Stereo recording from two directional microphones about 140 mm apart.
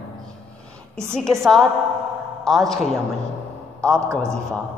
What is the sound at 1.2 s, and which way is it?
A man's voice, 5° left (ahead or behind).